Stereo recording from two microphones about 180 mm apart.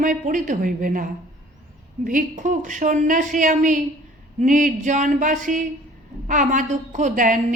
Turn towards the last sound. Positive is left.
turn(degrees=-45)  # may be behind; listen again after turning